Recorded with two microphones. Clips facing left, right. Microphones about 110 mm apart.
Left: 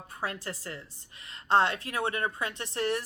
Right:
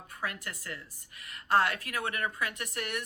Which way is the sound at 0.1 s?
30° left (ahead or behind).